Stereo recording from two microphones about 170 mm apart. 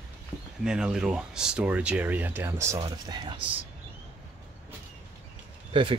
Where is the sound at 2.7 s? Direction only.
25° right (ahead or behind).